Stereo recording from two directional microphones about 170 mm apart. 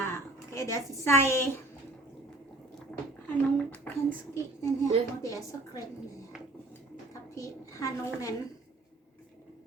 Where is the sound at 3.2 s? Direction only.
10° left (ahead or behind).